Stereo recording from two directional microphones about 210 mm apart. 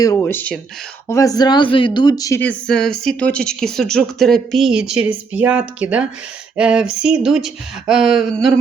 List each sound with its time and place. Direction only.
0.0 s speech: 15° left (ahead or behind)